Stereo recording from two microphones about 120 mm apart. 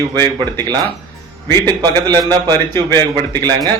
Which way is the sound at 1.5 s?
35° right (ahead or behind).